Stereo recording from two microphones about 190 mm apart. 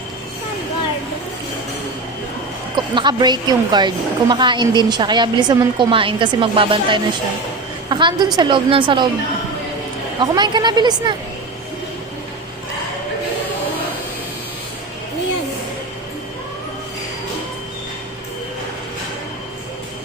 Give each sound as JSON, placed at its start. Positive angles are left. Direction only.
{"t": 2.7, "sound": "a woman's voice", "side_deg": -25}
{"t": 10.2, "sound": "a woman's voice", "side_deg": -25}